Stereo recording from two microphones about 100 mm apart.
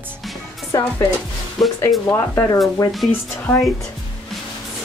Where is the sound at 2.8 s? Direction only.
35° left (ahead or behind).